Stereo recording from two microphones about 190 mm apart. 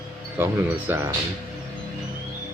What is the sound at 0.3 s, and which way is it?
Speech, 10° right (ahead or behind).